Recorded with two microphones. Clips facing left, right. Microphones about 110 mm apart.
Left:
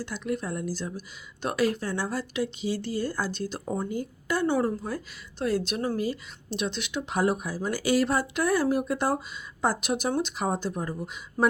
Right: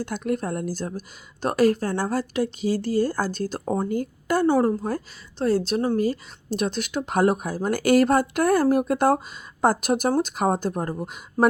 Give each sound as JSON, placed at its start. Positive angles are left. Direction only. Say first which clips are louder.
{"t": 0.0, "sound": "speech", "louder": "right 5 dB", "side_deg": -50}
{"t": 6.0, "sound": "speech", "louder": "right 6 dB", "side_deg": -45}